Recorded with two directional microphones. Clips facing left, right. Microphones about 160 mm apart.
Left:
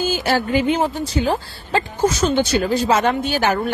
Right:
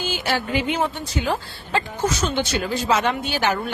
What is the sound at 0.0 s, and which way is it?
Speech, 40° left (ahead or behind).